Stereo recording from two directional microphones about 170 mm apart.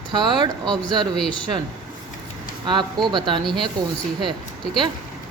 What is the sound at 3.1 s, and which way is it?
Speech, 25° right (ahead or behind).